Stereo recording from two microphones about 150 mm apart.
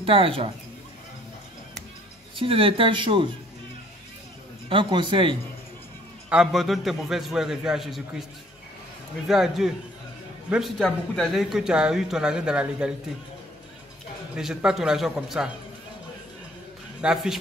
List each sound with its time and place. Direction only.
0.0 s speech: 35° right (ahead or behind)
2.3 s speech: 35° right (ahead or behind)
4.6 s speech: 35° right (ahead or behind)
6.3 s a man's voice: centre (ahead or behind)
9.3 s a man's voice: centre (ahead or behind)
14.3 s a man's voice: 5° right (ahead or behind)
17.0 s a man's voice: 5° right (ahead or behind)